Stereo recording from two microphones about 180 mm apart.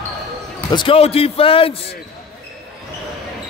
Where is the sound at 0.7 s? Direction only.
30° left (ahead or behind).